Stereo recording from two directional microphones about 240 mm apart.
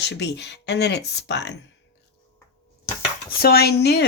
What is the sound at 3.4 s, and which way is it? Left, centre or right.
Speech, left.